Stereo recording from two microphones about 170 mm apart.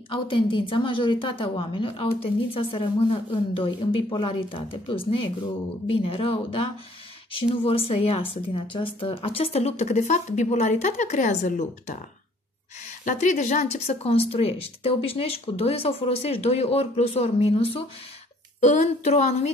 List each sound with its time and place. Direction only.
0.1 s a woman's voice: 30° left (ahead or behind); by 12.0 s 45° left (ahead or behind)
13.0 s speech: 45° left (ahead or behind)